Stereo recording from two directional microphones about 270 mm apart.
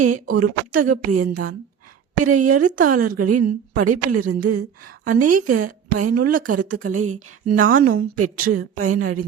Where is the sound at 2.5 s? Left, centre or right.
Right.